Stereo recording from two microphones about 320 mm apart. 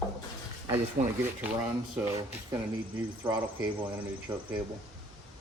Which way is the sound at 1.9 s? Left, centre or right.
Centre.